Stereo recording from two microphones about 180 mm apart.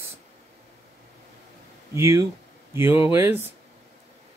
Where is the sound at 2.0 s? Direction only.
15° right (ahead or behind).